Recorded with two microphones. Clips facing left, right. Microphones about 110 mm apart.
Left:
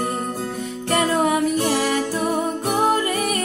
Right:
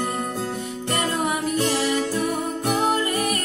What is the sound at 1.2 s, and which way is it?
Music, 45° left (ahead or behind).